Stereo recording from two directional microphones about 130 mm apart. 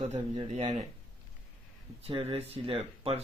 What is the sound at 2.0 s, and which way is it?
Speech, 50° right (ahead or behind).